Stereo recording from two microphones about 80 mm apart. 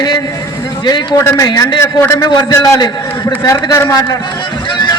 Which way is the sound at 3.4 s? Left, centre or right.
Left.